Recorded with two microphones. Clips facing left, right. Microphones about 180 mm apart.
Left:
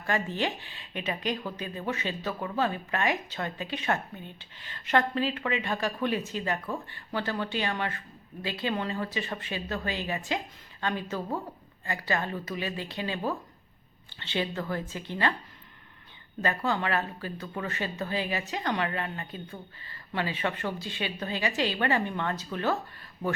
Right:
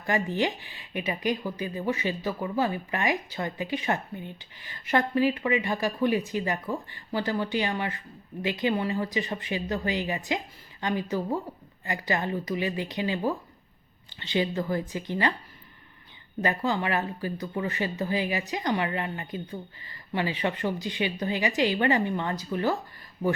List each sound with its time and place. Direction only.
0.0 s speech: 15° right (ahead or behind)
16.4 s speech: 15° right (ahead or behind)